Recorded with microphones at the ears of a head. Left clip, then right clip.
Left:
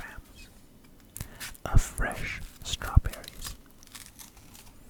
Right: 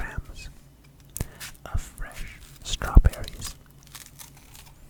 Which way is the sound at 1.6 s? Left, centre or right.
Left.